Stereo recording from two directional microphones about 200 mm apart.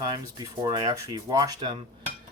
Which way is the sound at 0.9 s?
20° right (ahead or behind).